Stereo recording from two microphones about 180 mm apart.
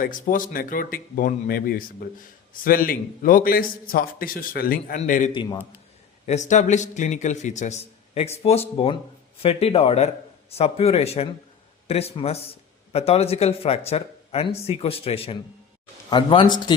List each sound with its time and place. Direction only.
0.0 s a man's voice: 50° left (ahead or behind)
5.3 s speech: 25° left (ahead or behind)
6.2 s speech: 40° left (ahead or behind)